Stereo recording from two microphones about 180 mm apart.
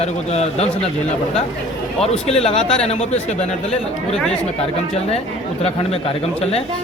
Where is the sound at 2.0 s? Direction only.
35° left (ahead or behind).